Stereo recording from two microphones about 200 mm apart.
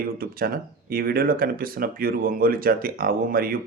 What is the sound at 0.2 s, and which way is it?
Speech, 45° right (ahead or behind).